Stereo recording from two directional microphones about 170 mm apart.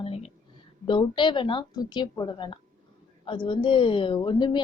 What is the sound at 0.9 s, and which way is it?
A woman's voice, 30° left (ahead or behind).